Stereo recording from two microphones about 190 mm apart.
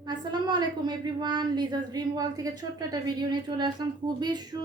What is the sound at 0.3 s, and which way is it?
A woman's voice, 25° right (ahead or behind).